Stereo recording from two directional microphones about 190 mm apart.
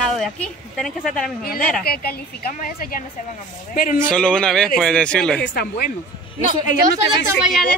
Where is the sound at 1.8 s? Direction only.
55° left (ahead or behind).